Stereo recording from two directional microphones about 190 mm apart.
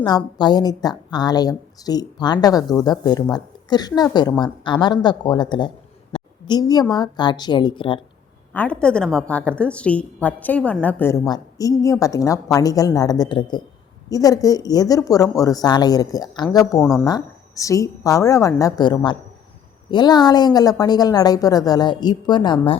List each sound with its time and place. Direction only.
0.3 s a woman's voice: 20° left (ahead or behind)
6.1 s a sound: 20° left (ahead or behind)
6.9 s a woman's voice: 20° left (ahead or behind)
8.5 s a woman's voice: 5° left (ahead or behind)
16.8 s a woman's voice: 5° left (ahead or behind)
17.1 s a woman's voice: 20° left (ahead or behind)